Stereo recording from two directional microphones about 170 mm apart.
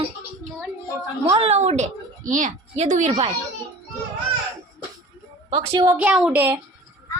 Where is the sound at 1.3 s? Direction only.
35° right (ahead or behind).